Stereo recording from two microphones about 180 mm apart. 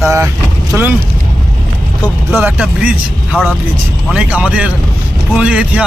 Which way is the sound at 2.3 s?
5° right (ahead or behind).